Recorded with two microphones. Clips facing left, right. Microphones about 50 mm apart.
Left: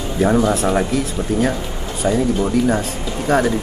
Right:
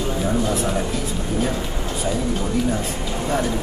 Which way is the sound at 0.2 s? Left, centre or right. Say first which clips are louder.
Left 9 dB; left.